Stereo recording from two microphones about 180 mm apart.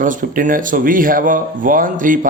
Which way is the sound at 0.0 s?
45° right (ahead or behind).